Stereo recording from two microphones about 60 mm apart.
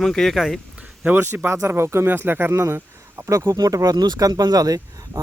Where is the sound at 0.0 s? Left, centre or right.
Centre.